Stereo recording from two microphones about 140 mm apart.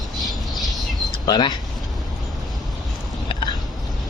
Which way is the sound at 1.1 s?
30° left (ahead or behind).